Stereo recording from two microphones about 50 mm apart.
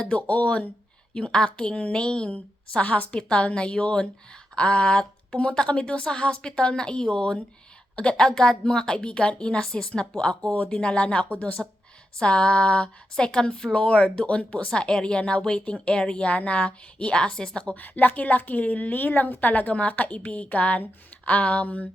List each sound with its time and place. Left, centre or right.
0.0 s a woman's voice: left
17.7 s a woman's voice: left